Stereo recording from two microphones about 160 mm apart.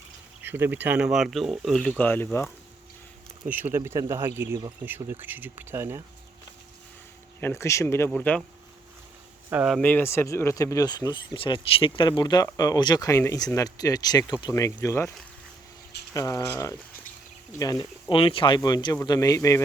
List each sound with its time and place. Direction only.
0.4 s speech: 15° right (ahead or behind); by 2.5 s 15° left (ahead or behind)
3.5 s speech: 15° right (ahead or behind)
7.4 s speech: 15° left (ahead or behind)
9.5 s speech: 5° right (ahead or behind)
9.8 s speech: 15° left (ahead or behind)
16.1 s speech: 20° left (ahead or behind)